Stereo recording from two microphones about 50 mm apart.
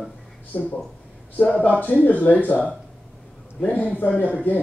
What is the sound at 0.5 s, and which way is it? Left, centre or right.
Speech, left.